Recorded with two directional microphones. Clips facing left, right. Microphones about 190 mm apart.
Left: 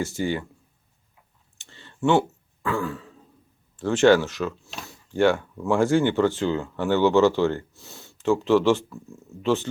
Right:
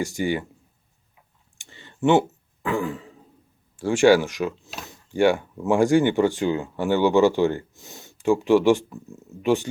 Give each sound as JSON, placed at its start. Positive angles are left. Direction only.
{"t": 0.0, "sound": "speech", "side_deg": -15}
{"t": 1.5, "sound": "clicking", "side_deg": -15}
{"t": 2.6, "sound": "throat clearing", "side_deg": -15}
{"t": 3.8, "sound": "speech", "side_deg": -10}